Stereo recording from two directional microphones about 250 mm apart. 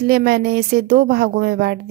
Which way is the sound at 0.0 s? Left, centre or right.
Right.